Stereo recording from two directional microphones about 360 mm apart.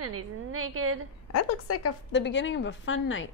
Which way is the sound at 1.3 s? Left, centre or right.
Left.